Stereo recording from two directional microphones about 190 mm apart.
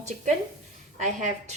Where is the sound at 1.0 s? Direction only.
40° right (ahead or behind).